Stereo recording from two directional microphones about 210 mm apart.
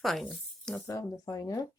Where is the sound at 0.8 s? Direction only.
15° left (ahead or behind).